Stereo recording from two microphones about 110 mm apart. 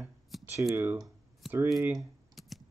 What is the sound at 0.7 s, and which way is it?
Speech, 20° right (ahead or behind).